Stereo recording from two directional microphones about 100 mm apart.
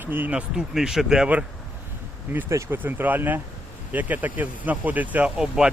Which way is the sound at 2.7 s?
20° right (ahead or behind).